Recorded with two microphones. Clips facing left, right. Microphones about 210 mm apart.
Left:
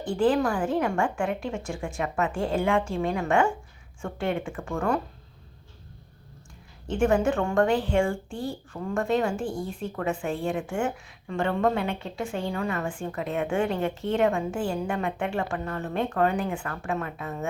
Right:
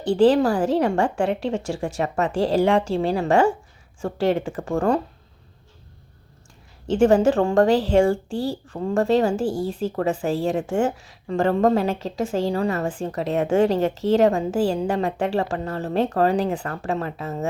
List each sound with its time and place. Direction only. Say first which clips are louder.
0.2 s a woman's voice: right 6 dB; 35° right (ahead or behind)
7.3 s a woman's voice: right 6 dB; 35° right (ahead or behind)
7.7 s speech: right 6 dB; 90° right
7.9 s a woman's voice: right 9 dB; 40° right (ahead or behind)
8.3 s speech: right 7 dB; 90° right
8.7 s a woman's voice: right 6 dB; 30° right (ahead or behind)
9.4 s speech: right 7 dB; 90° right
9.9 s a woman's voice: right 4 dB; 40° right (ahead or behind)